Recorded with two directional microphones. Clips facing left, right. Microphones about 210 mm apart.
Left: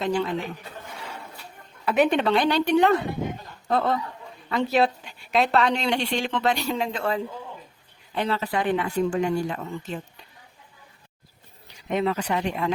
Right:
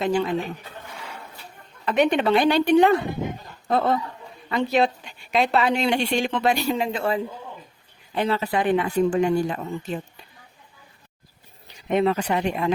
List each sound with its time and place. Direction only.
0.0 s speech: 10° right (ahead or behind)
1.8 s speech: 5° left (ahead or behind); by 10.0 s 15° right (ahead or behind)
12.0 s speech: 25° right (ahead or behind)